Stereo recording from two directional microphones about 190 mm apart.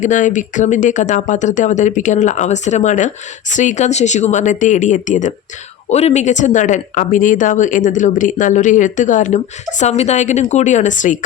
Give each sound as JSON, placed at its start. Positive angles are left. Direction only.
{"t": 0.0, "sound": "speech", "side_deg": 40}